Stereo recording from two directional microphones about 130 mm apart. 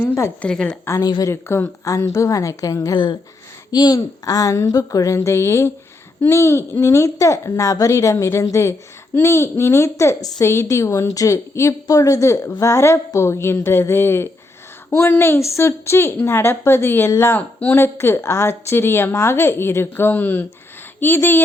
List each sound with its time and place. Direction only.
0.0 s a woman's voice: 20° left (ahead or behind)
0.4 s a woman's voice: 5° left (ahead or behind)
0.9 s a woman's voice: 30° left (ahead or behind)